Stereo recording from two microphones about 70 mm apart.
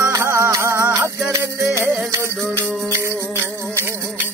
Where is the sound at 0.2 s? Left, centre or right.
Right.